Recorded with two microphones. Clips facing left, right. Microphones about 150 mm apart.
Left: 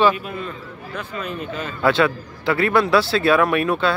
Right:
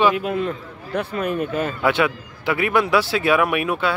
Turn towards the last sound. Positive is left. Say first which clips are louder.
# left 2 dB
turn(degrees=-15)  # may be behind; listen again after turning